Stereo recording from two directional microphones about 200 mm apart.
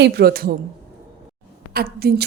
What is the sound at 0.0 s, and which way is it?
Speech, 50° right (ahead or behind).